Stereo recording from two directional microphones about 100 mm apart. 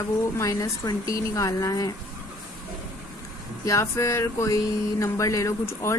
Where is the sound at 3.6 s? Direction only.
30° left (ahead or behind).